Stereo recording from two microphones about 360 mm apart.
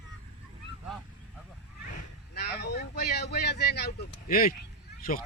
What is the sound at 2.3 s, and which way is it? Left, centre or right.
Vehicle, left.